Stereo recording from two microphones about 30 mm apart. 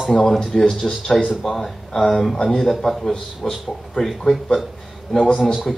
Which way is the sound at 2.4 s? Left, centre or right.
Centre.